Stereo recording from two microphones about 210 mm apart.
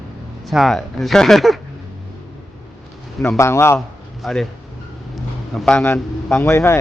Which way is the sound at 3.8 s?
Centre (ahead or behind).